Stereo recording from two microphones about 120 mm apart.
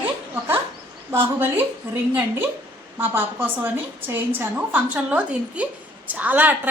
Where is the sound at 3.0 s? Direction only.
15° right (ahead or behind).